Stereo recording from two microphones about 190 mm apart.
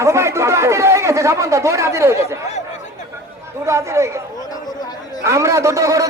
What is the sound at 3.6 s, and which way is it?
Speech, 15° right (ahead or behind).